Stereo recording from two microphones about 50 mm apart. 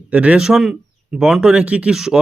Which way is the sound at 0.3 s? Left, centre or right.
Centre.